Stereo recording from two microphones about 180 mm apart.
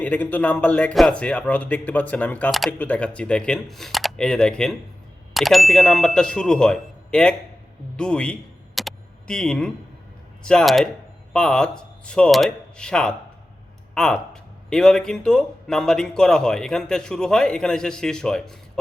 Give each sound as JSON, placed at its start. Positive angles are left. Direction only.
{"t": 0.0, "sound": "speech", "side_deg": 10}
{"t": 7.9, "sound": "a sound", "side_deg": 5}
{"t": 10.4, "sound": "speech", "side_deg": 5}